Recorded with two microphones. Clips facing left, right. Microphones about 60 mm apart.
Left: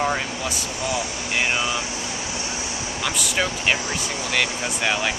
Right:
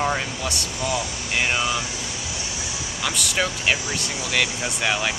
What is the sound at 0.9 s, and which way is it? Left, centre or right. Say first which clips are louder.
Speech: even; left.